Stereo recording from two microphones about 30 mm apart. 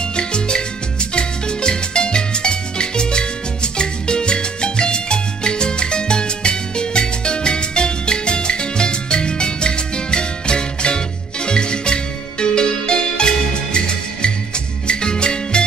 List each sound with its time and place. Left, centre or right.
0.0 s music: left